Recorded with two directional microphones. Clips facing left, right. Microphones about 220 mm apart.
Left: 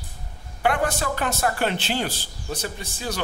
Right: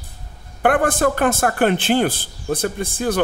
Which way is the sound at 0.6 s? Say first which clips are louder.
Right 7 dB; 50° right (ahead or behind).